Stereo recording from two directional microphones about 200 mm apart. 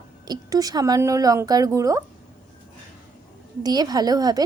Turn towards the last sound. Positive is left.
turn(degrees=-20)  # may be behind; listen again after turning